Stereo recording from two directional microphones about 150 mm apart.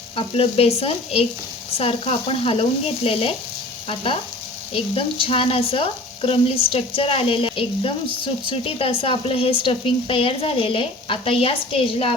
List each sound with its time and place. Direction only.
0.2 s speech: 40° left (ahead or behind)